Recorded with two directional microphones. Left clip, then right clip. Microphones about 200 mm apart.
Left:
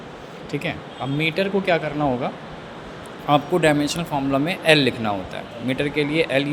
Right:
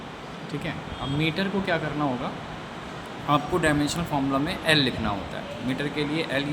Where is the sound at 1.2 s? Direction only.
20° left (ahead or behind).